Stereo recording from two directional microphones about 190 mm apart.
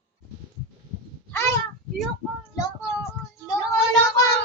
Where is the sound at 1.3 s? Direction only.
15° left (ahead or behind).